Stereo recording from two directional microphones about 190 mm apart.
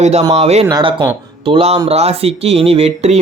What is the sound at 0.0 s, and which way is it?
Speech, 35° right (ahead or behind).